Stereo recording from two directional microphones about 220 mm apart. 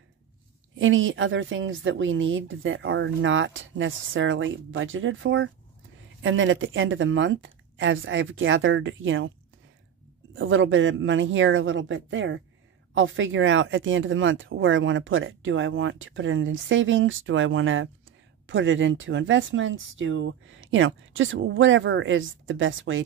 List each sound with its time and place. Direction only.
0.7 s speech: 60° right (ahead or behind)
10.3 s speech: 60° right (ahead or behind)